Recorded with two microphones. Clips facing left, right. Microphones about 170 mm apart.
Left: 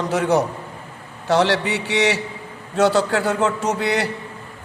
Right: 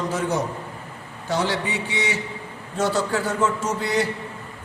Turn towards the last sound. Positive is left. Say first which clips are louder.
# left 2 dB
turn(degrees=65)  # may be behind; listen again after turning